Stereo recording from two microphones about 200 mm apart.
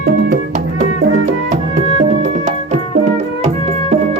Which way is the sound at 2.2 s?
35° right (ahead or behind).